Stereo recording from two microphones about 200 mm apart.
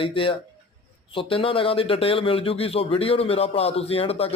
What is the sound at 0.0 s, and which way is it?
Speech, 25° left (ahead or behind).